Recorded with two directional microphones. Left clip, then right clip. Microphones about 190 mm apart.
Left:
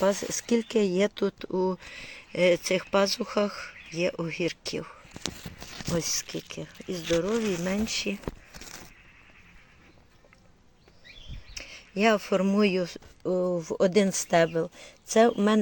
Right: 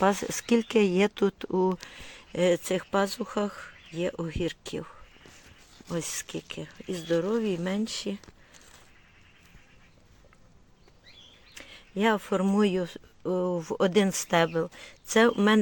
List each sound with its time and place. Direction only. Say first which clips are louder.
0.0 s speech: even; 20° right (ahead or behind)
5.9 s speech: left 4 dB; centre (ahead or behind)
11.5 s speech: left 2 dB; 10° right (ahead or behind)